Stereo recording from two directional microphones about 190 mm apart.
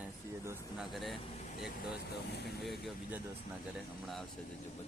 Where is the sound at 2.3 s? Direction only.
60° left (ahead or behind).